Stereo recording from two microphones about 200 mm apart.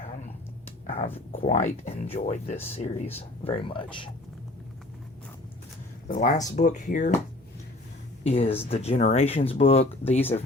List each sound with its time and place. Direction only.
0.9 s speech: 30° left (ahead or behind)
6.1 s speech: 40° left (ahead or behind)
8.3 s speech: 30° left (ahead or behind)